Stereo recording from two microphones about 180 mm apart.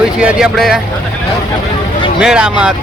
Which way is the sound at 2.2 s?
5° right (ahead or behind).